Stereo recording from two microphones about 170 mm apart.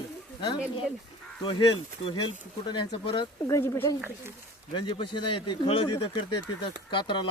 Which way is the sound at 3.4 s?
15° left (ahead or behind).